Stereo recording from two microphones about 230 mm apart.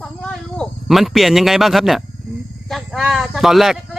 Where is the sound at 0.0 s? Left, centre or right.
Centre.